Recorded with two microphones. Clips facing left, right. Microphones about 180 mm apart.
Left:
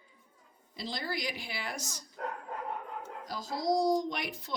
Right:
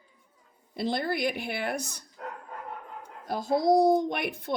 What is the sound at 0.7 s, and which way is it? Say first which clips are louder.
Speech: right 9 dB; 60° right (ahead or behind).